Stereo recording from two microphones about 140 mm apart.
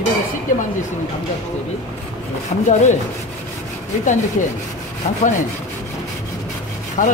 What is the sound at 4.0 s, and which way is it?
Speech, 65° left (ahead or behind).